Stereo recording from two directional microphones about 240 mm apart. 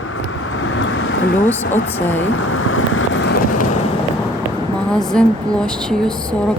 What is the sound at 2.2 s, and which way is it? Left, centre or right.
Vehicle, left.